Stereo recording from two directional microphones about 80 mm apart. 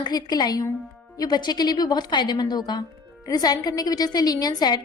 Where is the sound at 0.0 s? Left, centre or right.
Left.